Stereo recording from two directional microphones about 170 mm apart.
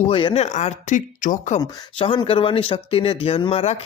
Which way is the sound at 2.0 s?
35° left (ahead or behind).